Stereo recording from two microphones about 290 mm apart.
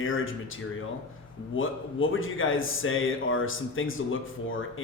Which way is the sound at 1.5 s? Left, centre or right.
Left.